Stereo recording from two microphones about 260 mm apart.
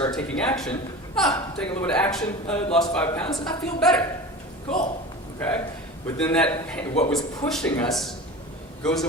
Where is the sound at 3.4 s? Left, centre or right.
Centre.